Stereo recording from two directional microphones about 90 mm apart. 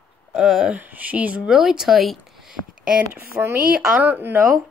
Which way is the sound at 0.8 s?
20° right (ahead or behind).